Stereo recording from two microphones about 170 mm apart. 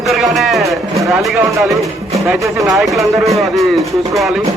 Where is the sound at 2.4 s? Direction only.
20° right (ahead or behind).